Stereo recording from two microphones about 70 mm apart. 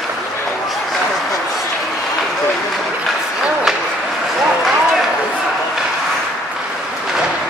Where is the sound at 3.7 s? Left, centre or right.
Centre.